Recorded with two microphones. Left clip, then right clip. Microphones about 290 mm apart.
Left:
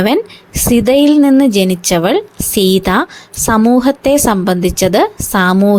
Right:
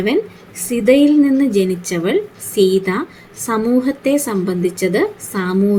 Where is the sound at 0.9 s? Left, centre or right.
Left.